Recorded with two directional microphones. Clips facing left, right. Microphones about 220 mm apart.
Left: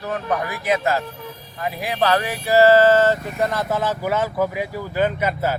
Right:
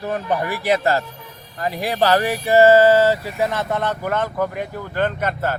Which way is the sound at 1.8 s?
35° right (ahead or behind).